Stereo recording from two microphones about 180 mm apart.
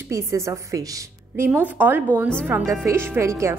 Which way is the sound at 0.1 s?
15° right (ahead or behind).